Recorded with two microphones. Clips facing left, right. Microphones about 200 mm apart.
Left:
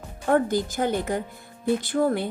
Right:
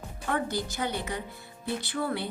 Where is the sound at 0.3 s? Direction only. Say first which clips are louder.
Left 9 dB; 45° left (ahead or behind).